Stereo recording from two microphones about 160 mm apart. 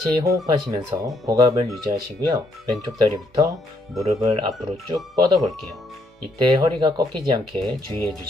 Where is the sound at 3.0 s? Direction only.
20° right (ahead or behind).